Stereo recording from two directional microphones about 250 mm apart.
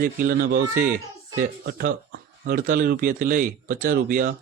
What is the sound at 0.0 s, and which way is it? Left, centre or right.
Speech, right.